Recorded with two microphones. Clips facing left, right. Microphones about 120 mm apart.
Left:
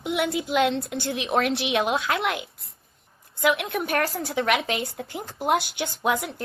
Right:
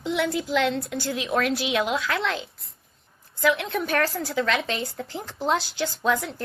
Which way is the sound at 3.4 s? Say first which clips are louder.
Even; 20° left (ahead or behind).